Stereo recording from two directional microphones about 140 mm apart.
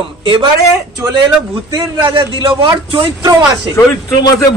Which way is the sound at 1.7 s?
35° right (ahead or behind).